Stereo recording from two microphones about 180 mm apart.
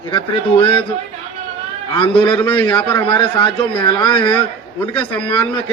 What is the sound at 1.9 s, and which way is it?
Speech, 30° left (ahead or behind).